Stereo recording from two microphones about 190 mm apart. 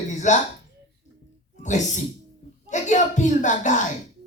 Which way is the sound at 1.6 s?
40° left (ahead or behind).